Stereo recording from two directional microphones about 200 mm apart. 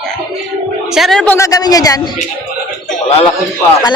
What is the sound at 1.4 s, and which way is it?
Speech, 20° left (ahead or behind).